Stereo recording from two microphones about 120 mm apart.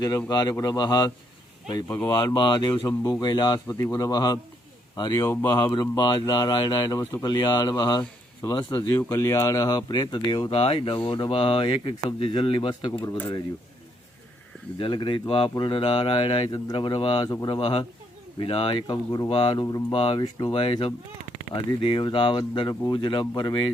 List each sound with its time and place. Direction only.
0.3 s speech: 35° left (ahead or behind)
2.2 s speech: 40° left (ahead or behind)
5.2 s speech: 20° left (ahead or behind)
5.7 s speech: 35° left (ahead or behind)
10.6 s speech: 50° left (ahead or behind)
13.0 s speech: 20° left (ahead or behind)
14.8 s speech: 45° left (ahead or behind)
17.2 s speech: 30° left (ahead or behind)
17.5 s speech: 50° left (ahead or behind)
20.5 s speech: 50° left (ahead or behind)